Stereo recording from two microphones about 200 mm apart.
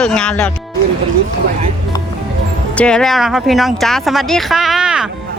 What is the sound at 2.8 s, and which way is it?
Speech, 5° left (ahead or behind).